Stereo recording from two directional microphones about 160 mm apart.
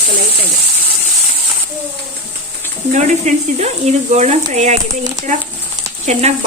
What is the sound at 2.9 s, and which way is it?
Speech, 45° right (ahead or behind).